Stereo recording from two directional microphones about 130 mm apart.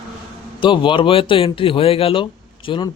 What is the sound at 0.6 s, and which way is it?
A man's voice, 40° left (ahead or behind).